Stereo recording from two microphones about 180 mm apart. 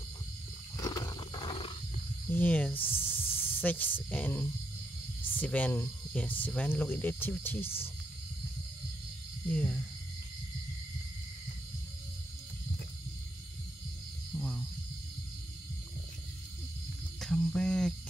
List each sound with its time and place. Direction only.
0.7 s wild animals: 20° left (ahead or behind)
2.2 s speech: 10° left (ahead or behind)
9.5 s speech: 5° left (ahead or behind)
14.3 s a sound: centre (ahead or behind)
17.2 s cricket: centre (ahead or behind)